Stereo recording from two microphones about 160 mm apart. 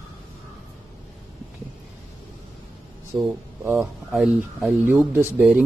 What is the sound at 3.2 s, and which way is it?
Speech, 15° right (ahead or behind).